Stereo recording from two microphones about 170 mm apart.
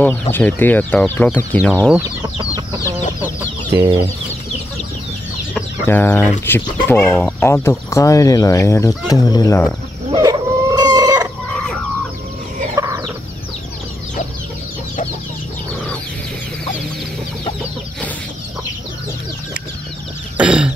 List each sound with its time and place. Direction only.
0.3 s speech: 10° left (ahead or behind)
2.0 s speech: 25° right (ahead or behind)
5.5 s speech: 10° left (ahead or behind)
10.1 s chicken: 20° right (ahead or behind)
12.7 s chicken: 20° right (ahead or behind)
20.3 s a sound: 5° right (ahead or behind)